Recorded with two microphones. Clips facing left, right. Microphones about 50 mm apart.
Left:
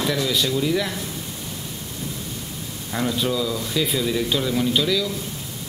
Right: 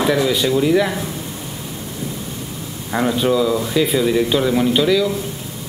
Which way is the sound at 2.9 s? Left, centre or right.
Right.